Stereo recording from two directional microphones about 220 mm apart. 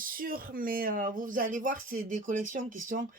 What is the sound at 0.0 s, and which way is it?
Speech, 40° right (ahead or behind).